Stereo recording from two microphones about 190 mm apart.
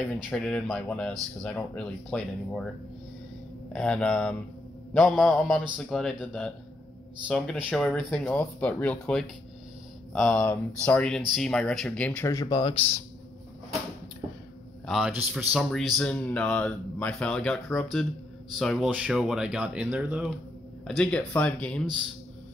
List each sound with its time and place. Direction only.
0.2 s speech: 5° left (ahead or behind)
3.7 s speech: 5° left (ahead or behind)
7.2 s speech: 5° left (ahead or behind)
12.3 s speech: 20° left (ahead or behind)
14.9 s speech: centre (ahead or behind)